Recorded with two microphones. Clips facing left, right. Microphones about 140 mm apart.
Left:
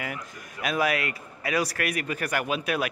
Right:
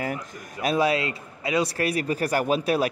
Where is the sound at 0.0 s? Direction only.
35° right (ahead or behind).